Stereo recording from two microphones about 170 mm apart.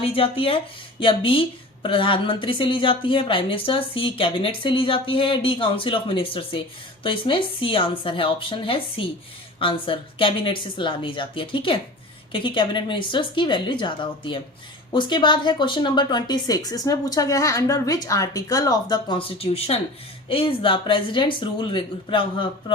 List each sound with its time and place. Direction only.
0.0 s speech: 35° left (ahead or behind)